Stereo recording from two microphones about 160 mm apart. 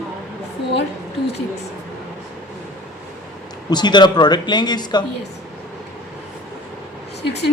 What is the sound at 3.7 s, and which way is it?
Speech, 25° left (ahead or behind).